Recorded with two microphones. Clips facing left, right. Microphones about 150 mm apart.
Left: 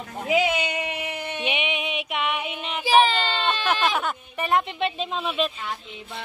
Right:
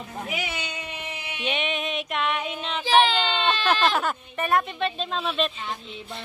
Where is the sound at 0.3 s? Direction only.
90° left; by 1.4 s 55° left (ahead or behind).